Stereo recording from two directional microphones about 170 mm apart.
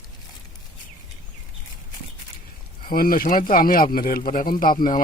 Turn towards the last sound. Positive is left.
turn(degrees=55)  # may be behind; listen again after turning